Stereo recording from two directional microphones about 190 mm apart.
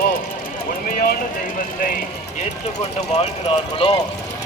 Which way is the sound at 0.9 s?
50° left (ahead or behind).